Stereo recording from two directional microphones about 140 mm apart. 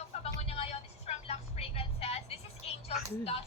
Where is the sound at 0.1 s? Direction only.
45° left (ahead or behind).